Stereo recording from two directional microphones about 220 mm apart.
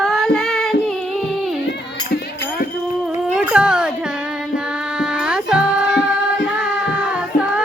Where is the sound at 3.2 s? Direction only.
5° right (ahead or behind).